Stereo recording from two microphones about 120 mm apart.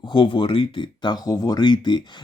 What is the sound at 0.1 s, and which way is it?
Speech, 45° left (ahead or behind).